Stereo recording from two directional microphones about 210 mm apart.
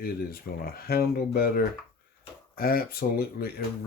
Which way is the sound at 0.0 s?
45° left (ahead or behind).